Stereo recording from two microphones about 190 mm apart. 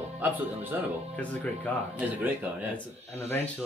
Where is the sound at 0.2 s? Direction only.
10° right (ahead or behind).